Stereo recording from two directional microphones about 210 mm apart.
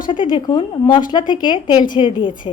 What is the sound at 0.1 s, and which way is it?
A woman's voice, 20° left (ahead or behind).